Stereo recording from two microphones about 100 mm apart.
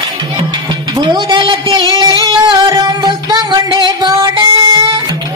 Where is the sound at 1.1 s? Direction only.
50° right (ahead or behind).